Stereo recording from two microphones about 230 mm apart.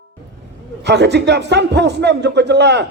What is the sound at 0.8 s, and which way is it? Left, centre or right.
A man's voice, right.